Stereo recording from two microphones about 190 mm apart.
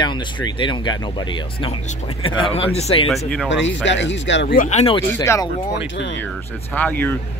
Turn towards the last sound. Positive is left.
turn(degrees=10)  # may be behind; listen again after turning